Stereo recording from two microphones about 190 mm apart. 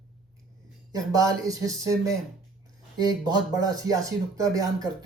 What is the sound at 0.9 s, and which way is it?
Speech, 20° right (ahead or behind).